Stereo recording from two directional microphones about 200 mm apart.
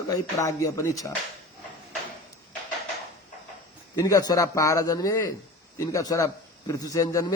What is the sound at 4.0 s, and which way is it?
Speech, 20° left (ahead or behind).